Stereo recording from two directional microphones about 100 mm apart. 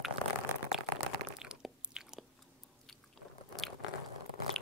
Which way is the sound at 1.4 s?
5° right (ahead or behind).